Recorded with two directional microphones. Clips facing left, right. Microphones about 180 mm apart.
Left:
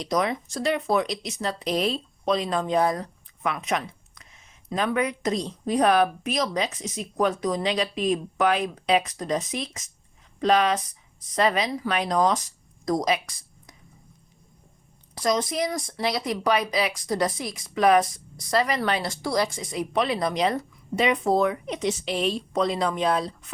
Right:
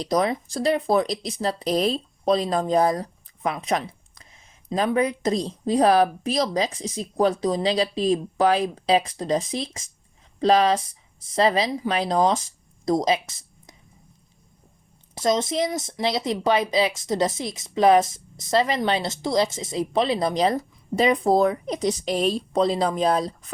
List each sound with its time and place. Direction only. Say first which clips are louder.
0.0 s speech: right 3 dB; 35° right (ahead or behind)
15.1 s speech: right 2 dB; 25° right (ahead or behind)